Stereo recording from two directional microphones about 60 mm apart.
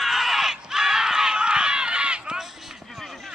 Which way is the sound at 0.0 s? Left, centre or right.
Centre.